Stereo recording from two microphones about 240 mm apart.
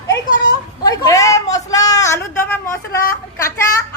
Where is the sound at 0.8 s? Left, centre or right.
Centre.